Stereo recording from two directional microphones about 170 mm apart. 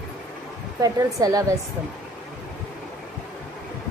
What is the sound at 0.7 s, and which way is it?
Speech, 20° right (ahead or behind).